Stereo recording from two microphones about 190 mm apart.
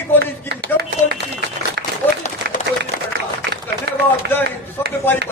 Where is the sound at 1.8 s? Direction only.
65° right (ahead or behind).